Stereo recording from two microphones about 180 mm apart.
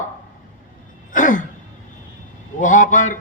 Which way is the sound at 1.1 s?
45° left (ahead or behind).